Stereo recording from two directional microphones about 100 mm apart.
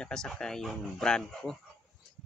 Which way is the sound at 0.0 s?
5° left (ahead or behind).